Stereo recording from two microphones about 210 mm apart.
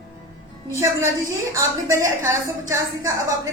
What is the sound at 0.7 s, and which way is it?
A woman's voice, 15° right (ahead or behind).